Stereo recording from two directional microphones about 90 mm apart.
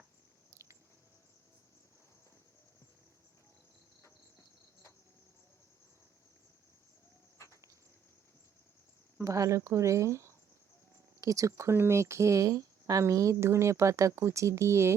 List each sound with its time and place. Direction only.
7.3 s bird: 35° left (ahead or behind)
9.2 s speech: 35° right (ahead or behind)